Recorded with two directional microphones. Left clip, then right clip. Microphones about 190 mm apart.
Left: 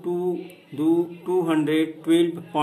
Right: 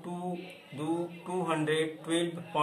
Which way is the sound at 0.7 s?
50° left (ahead or behind).